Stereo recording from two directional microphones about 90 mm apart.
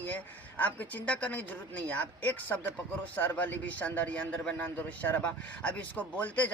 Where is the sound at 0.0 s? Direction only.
20° left (ahead or behind).